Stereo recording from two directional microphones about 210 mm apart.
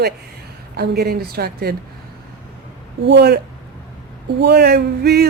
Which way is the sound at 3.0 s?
55° right (ahead or behind).